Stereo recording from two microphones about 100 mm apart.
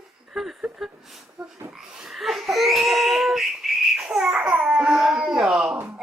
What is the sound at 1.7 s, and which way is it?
Crying, 5° right (ahead or behind).